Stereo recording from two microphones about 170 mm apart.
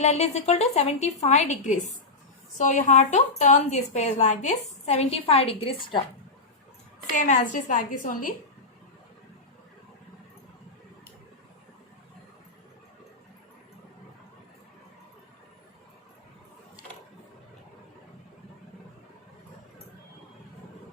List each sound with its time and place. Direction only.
0.0 s a woman's voice: 40° left (ahead or behind)
7.1 s a woman's voice: 45° left (ahead or behind)